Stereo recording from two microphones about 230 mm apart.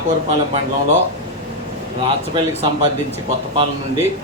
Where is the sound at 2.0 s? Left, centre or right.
Right.